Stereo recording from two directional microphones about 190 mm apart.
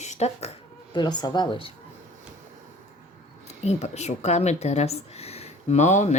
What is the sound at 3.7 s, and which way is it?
A woman's voice, 35° left (ahead or behind).